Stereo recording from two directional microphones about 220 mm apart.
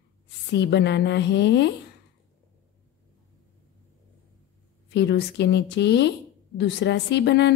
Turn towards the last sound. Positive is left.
turn(degrees=50)  # may be behind; listen again after turning